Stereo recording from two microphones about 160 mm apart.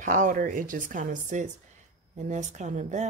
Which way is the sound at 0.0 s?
55° right (ahead or behind).